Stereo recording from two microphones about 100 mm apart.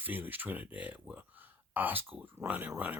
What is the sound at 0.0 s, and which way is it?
Speech, 20° right (ahead or behind).